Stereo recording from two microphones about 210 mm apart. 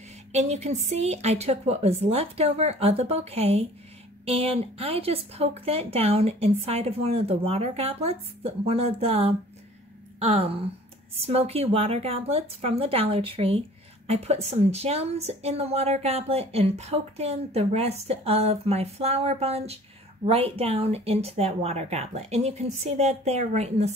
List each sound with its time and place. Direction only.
0.3 s a woman's voice: 30° right (ahead or behind)